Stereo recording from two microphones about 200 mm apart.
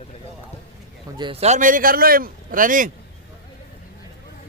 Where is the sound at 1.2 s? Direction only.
30° right (ahead or behind).